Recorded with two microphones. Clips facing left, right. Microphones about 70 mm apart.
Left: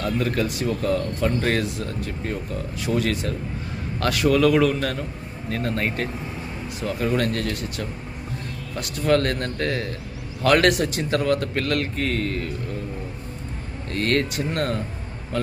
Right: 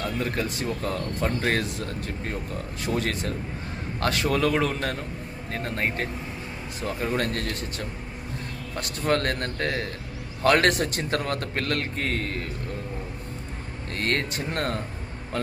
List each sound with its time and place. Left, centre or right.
0.0 s speech: right
0.4 s a man's voice: right
13.9 s a man's voice: right